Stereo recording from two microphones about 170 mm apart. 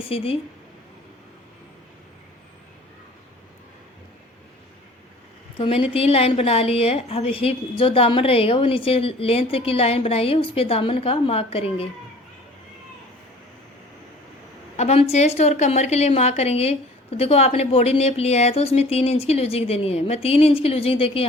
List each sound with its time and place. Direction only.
0.1 s a woman's voice: 35° left (ahead or behind)
5.5 s a woman's voice: 30° left (ahead or behind)
14.8 s a woman's voice: 40° left (ahead or behind)